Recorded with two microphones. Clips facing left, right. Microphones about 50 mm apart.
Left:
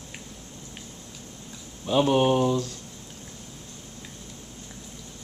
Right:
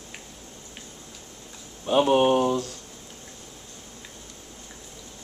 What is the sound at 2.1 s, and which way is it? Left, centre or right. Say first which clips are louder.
Speech: right 2 dB; centre.